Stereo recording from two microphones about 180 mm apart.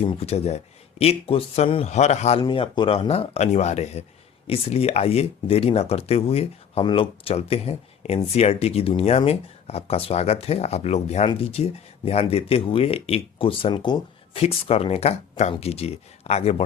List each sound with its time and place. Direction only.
0.0 s speech: 30° left (ahead or behind)
2.4 s speech: 25° left (ahead or behind)